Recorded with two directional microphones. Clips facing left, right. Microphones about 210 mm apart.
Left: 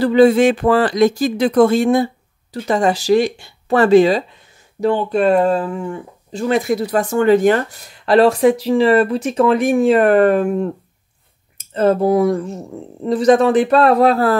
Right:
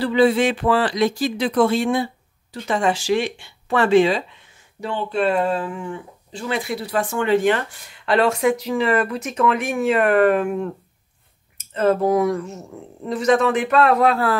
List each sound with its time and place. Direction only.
0.0 s speech: 45° left (ahead or behind)
11.7 s speech: 30° left (ahead or behind)